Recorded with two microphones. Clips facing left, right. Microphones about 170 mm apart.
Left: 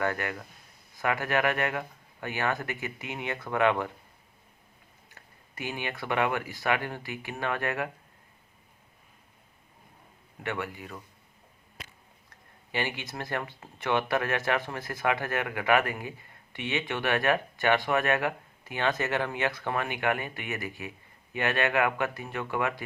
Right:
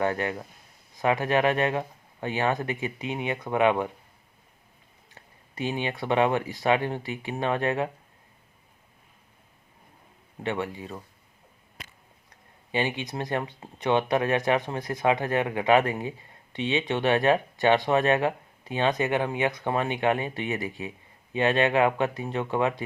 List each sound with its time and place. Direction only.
0.0 s speech: 25° right (ahead or behind)
5.1 s speech: 20° right (ahead or behind)
10.4 s speech: 20° right (ahead or behind)
12.7 s speech: 20° right (ahead or behind)